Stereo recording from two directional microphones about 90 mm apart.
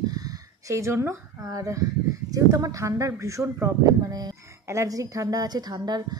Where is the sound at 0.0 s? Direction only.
45° right (ahead or behind).